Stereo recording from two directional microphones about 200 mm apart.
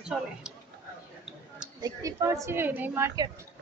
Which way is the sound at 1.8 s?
15° right (ahead or behind).